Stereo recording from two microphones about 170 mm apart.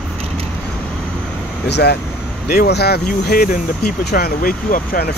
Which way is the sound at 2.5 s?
70° left (ahead or behind).